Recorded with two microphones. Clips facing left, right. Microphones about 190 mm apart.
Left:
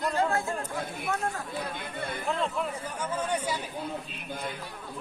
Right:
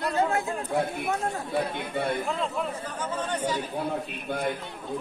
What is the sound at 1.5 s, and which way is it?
Speech, 65° right (ahead or behind).